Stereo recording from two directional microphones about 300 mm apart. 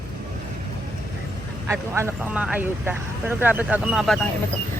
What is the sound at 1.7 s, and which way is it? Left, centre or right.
Speech, centre.